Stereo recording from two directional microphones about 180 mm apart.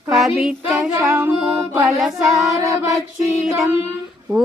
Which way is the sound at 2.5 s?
20° right (ahead or behind).